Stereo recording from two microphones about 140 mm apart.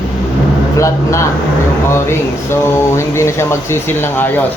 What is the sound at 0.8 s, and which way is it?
Speech, 20° left (ahead or behind).